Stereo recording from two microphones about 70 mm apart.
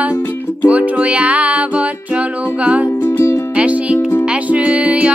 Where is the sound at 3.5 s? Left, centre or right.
Centre.